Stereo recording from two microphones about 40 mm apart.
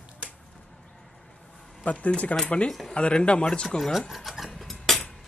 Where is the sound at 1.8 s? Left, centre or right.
Left.